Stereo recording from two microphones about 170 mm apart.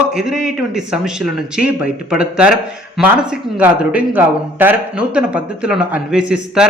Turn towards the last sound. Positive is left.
turn(degrees=-5)  # may be behind; listen again after turning